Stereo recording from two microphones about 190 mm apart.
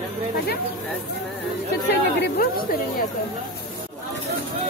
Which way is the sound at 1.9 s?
60° left (ahead or behind).